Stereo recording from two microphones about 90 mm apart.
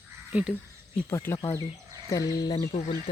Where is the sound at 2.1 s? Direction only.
40° left (ahead or behind).